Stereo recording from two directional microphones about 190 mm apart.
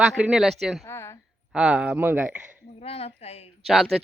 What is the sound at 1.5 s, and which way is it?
Speech, 5° right (ahead or behind).